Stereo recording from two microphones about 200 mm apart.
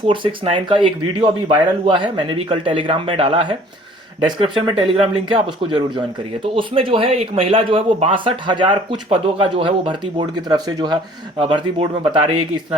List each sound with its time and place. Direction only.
0.1 s speech: 25° right (ahead or behind)